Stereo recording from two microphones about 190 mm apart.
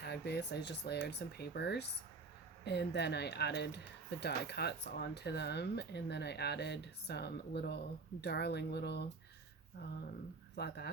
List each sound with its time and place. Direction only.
0.0 s speech: 60° left (ahead or behind)
10.5 s speech: 60° left (ahead or behind)